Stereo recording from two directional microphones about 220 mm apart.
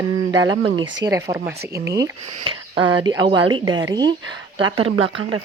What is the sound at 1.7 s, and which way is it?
Speech, 50° right (ahead or behind).